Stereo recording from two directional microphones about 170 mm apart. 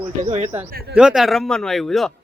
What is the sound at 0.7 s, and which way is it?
Speech, 60° right (ahead or behind).